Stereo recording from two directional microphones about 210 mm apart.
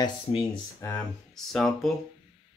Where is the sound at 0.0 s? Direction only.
25° left (ahead or behind).